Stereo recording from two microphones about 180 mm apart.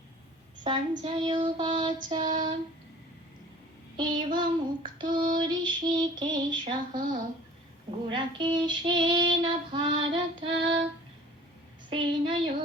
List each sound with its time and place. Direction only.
0.6 s child singing: 25° right (ahead or behind)
3.9 s child singing: 25° right (ahead or behind)
11.9 s child singing: 25° right (ahead or behind)